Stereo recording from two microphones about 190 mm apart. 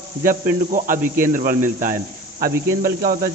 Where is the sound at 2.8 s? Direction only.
50° right (ahead or behind).